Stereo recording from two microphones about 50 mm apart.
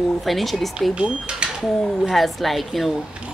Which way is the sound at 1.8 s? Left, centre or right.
Centre.